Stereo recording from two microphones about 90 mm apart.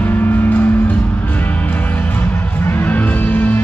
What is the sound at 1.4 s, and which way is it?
Music, 20° left (ahead or behind).